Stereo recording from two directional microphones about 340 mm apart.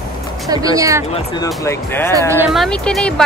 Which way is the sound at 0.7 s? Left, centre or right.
Centre.